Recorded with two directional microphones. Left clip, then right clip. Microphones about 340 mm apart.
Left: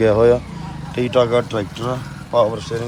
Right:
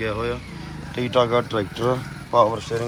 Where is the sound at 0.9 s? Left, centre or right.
Centre.